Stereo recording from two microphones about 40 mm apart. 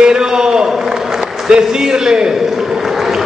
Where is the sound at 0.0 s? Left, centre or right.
Centre.